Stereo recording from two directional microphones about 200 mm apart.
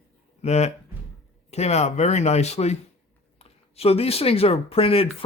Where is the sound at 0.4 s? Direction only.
35° left (ahead or behind).